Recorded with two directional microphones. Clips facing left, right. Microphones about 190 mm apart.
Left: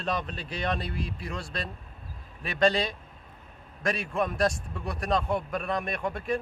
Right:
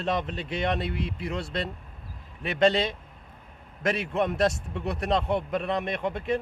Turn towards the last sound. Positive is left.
turn(degrees=-20)  # may be behind; listen again after turning